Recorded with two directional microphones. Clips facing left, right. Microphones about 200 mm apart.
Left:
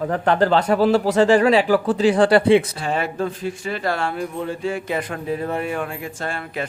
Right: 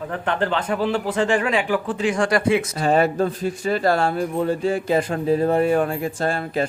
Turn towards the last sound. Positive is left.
turn(degrees=-35)  # may be behind; listen again after turning